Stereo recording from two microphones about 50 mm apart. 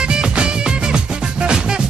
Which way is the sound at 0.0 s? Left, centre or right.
Centre.